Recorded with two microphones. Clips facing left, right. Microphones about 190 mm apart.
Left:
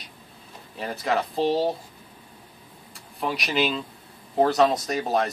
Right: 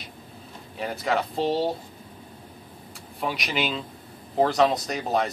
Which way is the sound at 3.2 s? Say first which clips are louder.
Left 3 dB; centre (ahead or behind).